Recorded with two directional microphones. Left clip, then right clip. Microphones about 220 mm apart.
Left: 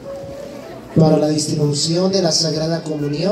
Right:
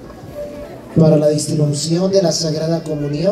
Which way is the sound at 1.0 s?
40° right (ahead or behind).